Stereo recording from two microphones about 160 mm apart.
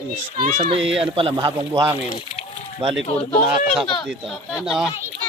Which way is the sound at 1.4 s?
25° right (ahead or behind).